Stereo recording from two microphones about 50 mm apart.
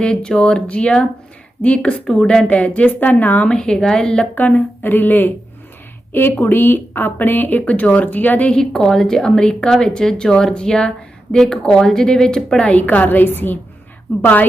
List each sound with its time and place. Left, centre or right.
0.0 s speech: centre
2.5 s speech: left
3.5 s speech: centre
4.4 s a woman's voice: left
8.4 s speech: centre; by 14.4 s left